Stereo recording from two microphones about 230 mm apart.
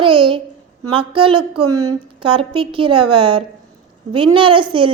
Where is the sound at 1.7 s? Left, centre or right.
Centre.